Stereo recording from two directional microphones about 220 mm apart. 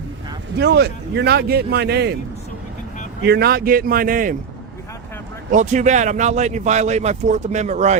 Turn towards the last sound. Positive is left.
turn(degrees=-30)  # may be behind; listen again after turning